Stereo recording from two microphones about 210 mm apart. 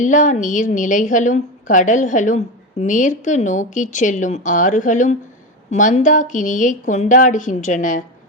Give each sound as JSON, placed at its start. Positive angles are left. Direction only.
{"t": 0.0, "sound": "a woman's voice", "side_deg": 35}